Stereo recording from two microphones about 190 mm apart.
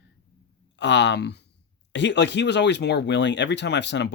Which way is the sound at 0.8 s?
70° left (ahead or behind).